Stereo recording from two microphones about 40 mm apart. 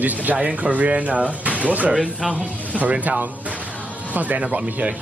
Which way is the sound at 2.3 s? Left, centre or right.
Right.